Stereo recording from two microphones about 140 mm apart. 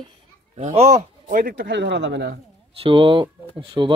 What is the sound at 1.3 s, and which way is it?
Speech, 90° right.